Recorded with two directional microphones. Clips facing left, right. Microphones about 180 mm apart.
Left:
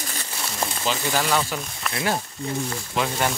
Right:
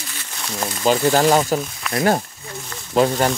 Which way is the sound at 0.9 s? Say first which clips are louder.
Right 9 dB; 40° right (ahead or behind).